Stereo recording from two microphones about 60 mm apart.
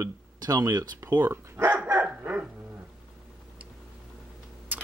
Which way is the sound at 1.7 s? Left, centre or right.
Right.